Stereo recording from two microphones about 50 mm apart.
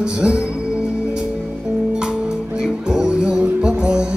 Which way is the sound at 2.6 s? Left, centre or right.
Centre.